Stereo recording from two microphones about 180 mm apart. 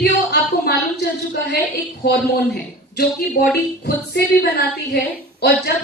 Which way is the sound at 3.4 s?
45° left (ahead or behind).